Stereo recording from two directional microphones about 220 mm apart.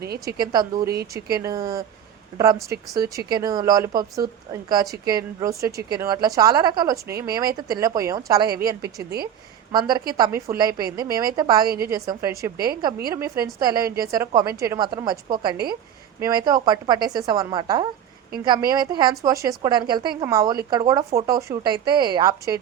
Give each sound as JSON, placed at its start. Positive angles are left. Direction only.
{"t": 0.0, "sound": "a woman's voice", "side_deg": -45}
{"t": 0.3, "sound": "a woman's voice", "side_deg": -20}
{"t": 9.0, "sound": "a woman's voice", "side_deg": -45}
{"t": 9.7, "sound": "a woman's voice", "side_deg": -20}
{"t": 16.2, "sound": "a woman's voice", "side_deg": -15}